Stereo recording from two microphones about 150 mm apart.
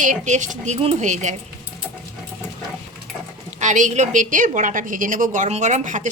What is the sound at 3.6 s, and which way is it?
A woman's voice, 55° right (ahead or behind).